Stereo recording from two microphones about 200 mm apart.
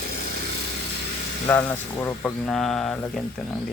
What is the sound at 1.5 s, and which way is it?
Speech, 10° left (ahead or behind).